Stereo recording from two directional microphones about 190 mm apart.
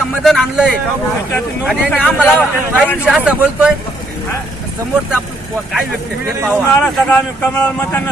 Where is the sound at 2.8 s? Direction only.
10° left (ahead or behind).